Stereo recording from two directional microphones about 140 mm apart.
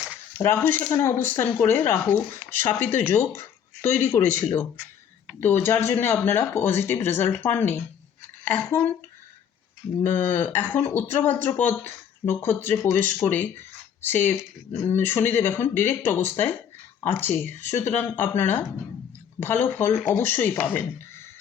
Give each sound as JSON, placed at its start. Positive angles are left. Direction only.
{"t": 0.3, "sound": "speech", "side_deg": 15}
{"t": 10.0, "sound": "speech", "side_deg": 15}